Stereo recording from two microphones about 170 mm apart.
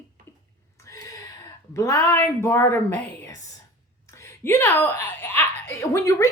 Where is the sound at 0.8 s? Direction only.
20° left (ahead or behind).